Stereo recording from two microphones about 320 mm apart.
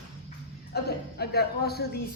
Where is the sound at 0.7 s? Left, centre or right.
Left.